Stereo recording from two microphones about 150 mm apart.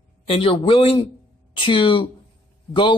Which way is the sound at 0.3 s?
35° left (ahead or behind).